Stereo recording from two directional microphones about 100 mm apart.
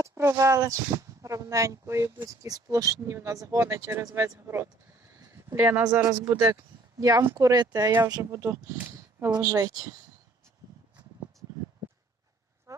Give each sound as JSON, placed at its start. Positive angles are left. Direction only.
{"t": 0.0, "sound": "speech", "side_deg": -30}
{"t": 6.1, "sound": "speech", "side_deg": -25}
{"t": 7.0, "sound": "speech", "side_deg": -35}
{"t": 12.7, "sound": "a sound", "side_deg": -30}